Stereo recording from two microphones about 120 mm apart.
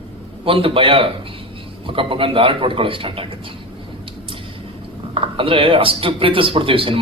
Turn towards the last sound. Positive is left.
turn(degrees=-50)  # may be behind; listen again after turning